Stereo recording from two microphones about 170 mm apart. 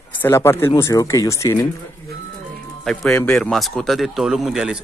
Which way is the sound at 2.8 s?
Centre (ahead or behind).